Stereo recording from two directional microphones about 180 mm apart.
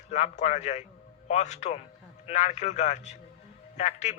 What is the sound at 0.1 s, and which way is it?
A man's voice, 40° left (ahead or behind).